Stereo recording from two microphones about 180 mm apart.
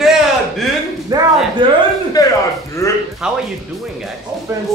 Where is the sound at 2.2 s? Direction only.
20° left (ahead or behind).